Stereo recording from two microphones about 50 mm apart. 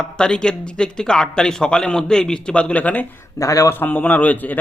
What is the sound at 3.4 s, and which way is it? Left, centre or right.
Speech, left.